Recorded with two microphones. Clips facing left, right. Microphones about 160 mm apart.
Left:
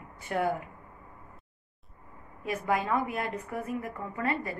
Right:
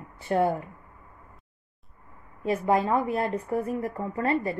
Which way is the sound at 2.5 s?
30° right (ahead or behind).